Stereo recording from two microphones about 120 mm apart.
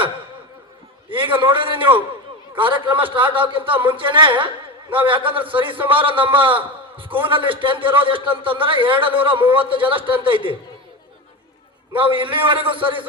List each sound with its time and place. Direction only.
1.1 s speech: 45° right (ahead or behind)
11.9 s speech: 45° right (ahead or behind)